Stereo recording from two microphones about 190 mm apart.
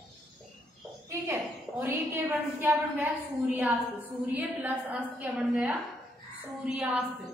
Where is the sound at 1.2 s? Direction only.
10° right (ahead or behind).